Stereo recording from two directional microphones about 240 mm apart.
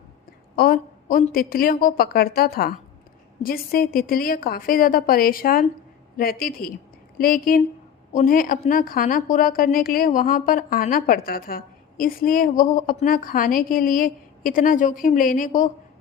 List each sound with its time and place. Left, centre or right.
0.5 s a woman's voice: left